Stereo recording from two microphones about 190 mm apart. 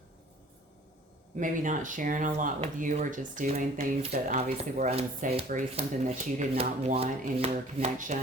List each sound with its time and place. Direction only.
1.4 s speech: 45° right (ahead or behind)
4.4 s rub: 35° right (ahead or behind)